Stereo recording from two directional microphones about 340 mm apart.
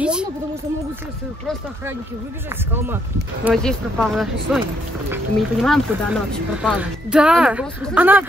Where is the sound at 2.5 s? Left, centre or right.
Centre.